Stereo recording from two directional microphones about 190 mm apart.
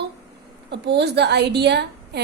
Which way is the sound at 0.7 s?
65° right (ahead or behind).